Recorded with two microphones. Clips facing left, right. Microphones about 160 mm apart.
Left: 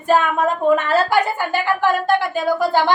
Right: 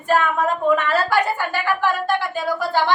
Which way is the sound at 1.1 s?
15° left (ahead or behind).